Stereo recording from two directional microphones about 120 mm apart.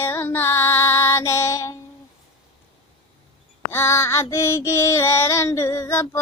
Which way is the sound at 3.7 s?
20° left (ahead or behind).